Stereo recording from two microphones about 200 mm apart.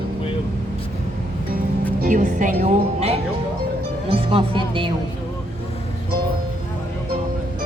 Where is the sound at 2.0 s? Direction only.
40° right (ahead or behind); by 4.9 s 25° right (ahead or behind).